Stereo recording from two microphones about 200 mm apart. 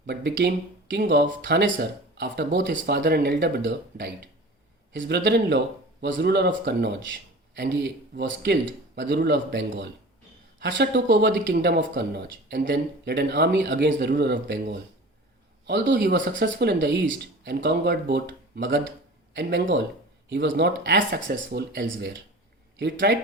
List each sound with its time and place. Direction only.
0.0 s speech: 60° right (ahead or behind)